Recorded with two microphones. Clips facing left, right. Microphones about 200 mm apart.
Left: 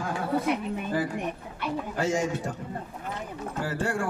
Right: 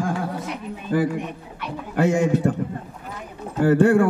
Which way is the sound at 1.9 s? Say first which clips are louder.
Right 9 dB; 60° right (ahead or behind).